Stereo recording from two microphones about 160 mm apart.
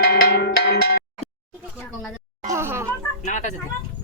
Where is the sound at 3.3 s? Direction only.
50° left (ahead or behind).